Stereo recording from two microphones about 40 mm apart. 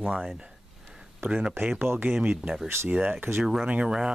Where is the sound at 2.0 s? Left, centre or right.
Right.